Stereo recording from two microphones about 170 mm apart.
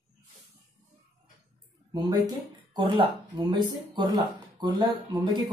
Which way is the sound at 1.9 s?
25° right (ahead or behind).